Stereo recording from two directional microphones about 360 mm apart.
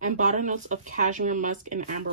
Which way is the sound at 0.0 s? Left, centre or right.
Right.